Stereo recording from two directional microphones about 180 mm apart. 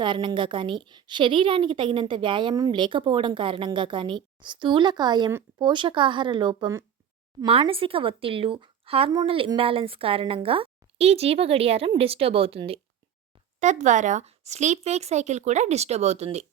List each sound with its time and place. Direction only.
0.0 s a woman's voice: 25° right (ahead or behind)
13.6 s a woman's voice: 40° right (ahead or behind)